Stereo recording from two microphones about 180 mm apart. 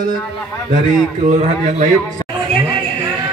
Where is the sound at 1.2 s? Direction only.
40° right (ahead or behind).